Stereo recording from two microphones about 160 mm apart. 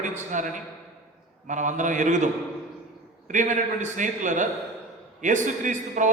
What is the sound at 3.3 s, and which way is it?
A man's voice, 50° right (ahead or behind).